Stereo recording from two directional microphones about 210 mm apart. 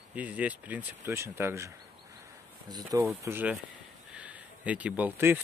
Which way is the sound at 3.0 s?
10° right (ahead or behind).